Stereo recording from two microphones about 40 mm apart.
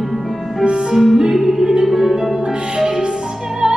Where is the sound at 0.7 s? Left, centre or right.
Centre.